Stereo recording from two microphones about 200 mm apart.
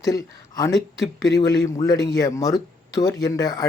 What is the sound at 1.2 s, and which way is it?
Speech, 20° left (ahead or behind).